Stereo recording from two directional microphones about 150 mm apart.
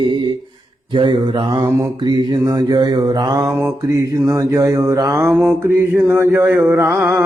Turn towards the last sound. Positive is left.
turn(degrees=-15)  # may be behind; listen again after turning